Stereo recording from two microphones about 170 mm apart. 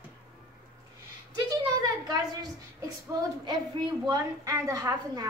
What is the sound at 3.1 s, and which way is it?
A woman's voice, 25° right (ahead or behind).